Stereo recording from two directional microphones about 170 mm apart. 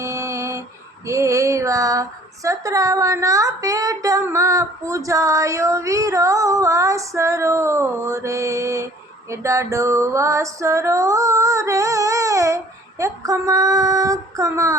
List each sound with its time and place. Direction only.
0.0 s a sound: 15° right (ahead or behind)
1.0 s speech: 15° right (ahead or behind)
9.3 s music: 15° right (ahead or behind)
13.0 s speech: 20° right (ahead or behind)